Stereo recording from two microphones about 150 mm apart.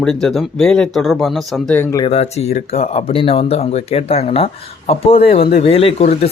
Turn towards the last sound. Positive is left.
turn(degrees=45)  # may be behind; listen again after turning